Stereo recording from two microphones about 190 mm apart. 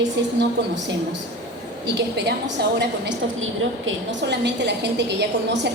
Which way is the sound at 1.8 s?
65° right (ahead or behind).